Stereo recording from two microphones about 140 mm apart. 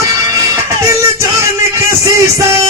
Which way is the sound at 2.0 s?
20° right (ahead or behind).